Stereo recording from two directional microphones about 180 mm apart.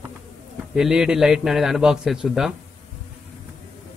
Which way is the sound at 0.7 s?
5° right (ahead or behind).